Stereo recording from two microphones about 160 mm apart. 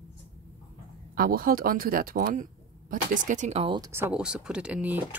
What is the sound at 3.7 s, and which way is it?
Speech, 20° right (ahead or behind).